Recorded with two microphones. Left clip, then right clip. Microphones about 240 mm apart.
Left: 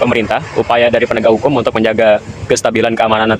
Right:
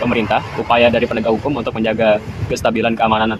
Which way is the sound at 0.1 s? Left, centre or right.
Left.